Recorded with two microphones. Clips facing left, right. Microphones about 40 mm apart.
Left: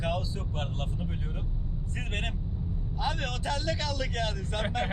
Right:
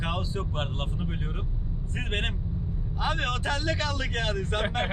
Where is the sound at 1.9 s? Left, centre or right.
Right.